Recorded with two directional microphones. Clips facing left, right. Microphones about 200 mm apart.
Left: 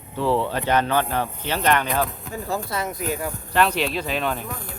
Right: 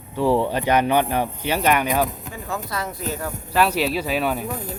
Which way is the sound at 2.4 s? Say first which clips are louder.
Left 1 dB; 30° left (ahead or behind).